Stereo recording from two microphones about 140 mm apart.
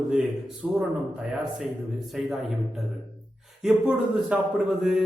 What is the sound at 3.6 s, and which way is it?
Speech, 5° right (ahead or behind).